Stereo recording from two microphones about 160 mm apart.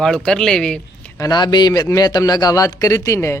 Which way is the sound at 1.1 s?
25° left (ahead or behind).